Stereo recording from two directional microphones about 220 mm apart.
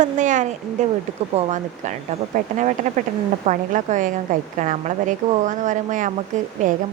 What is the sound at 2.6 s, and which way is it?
Speech, 35° right (ahead or behind).